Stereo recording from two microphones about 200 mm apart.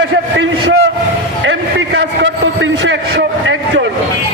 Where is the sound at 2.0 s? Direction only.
65° right (ahead or behind).